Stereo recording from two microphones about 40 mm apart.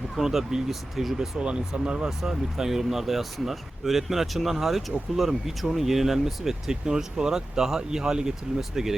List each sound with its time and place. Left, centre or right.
0.2 s speech: centre
1.5 s speech: right